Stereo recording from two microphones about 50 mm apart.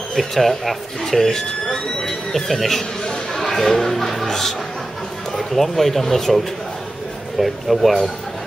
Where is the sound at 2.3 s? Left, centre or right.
Centre.